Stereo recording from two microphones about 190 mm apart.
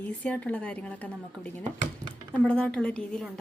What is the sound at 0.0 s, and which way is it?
A woman's voice, 5° left (ahead or behind).